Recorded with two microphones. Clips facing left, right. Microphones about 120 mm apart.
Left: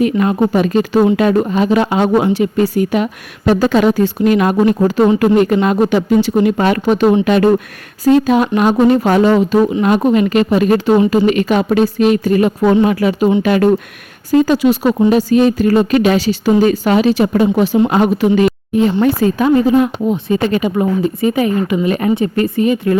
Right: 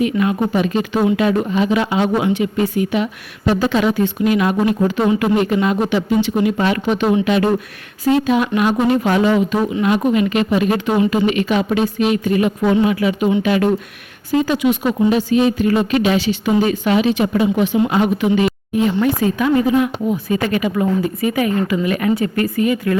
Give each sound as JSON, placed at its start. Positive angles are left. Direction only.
{"t": 0.0, "sound": "a woman's voice", "side_deg": 40}
{"t": 17.8, "sound": "speech", "side_deg": 45}
{"t": 18.7, "sound": "a woman's voice", "side_deg": 35}